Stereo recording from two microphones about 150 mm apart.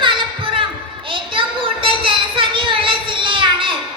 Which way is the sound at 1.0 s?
35° right (ahead or behind).